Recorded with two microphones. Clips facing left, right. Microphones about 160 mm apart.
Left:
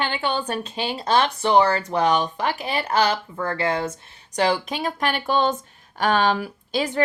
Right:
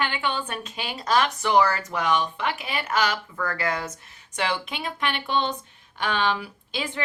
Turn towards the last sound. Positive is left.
turn(degrees=40)  # may be behind; listen again after turning